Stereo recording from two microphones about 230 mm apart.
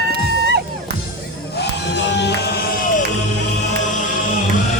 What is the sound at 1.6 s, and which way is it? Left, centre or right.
Music, left.